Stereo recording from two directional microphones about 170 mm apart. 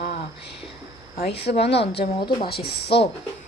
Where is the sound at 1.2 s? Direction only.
80° left.